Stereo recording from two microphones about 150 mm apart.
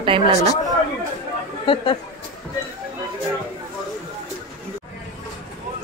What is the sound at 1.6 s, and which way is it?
Speech, 35° left (ahead or behind).